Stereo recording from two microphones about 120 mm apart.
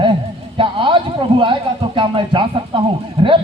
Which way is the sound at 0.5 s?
45° right (ahead or behind).